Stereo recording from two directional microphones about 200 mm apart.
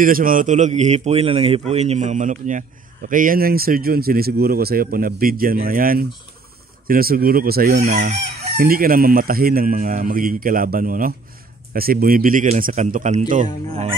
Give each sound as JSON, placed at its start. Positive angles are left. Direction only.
{"t": 0.0, "sound": "a man's voice", "side_deg": -45}
{"t": 3.1, "sound": "chicken", "side_deg": -45}